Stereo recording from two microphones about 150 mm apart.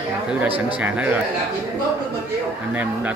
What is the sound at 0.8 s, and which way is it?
Speech, 10° right (ahead or behind).